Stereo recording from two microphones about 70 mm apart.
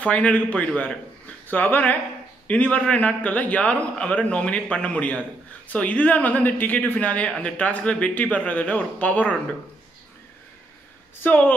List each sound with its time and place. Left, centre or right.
0.0 s a man's voice: centre
11.2 s speech: left